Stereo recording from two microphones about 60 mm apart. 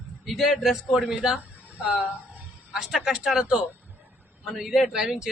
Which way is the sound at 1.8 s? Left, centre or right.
Right.